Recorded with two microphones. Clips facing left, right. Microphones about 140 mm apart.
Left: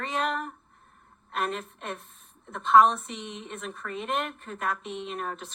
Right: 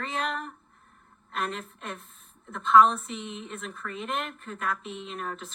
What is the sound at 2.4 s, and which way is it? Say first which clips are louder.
A woman's voice: even; 35° left (ahead or behind).